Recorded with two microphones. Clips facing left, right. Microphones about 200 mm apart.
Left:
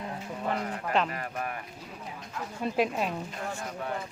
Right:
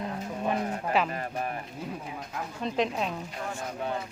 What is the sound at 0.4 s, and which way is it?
Speech, 20° right (ahead or behind).